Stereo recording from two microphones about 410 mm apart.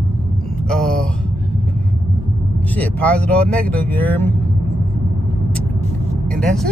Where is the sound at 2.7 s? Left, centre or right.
Centre.